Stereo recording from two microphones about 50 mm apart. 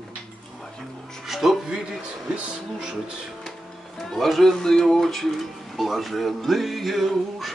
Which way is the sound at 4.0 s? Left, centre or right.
Centre.